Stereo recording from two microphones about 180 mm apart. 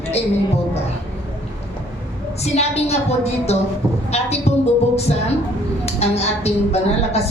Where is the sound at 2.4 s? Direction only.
35° left (ahead or behind).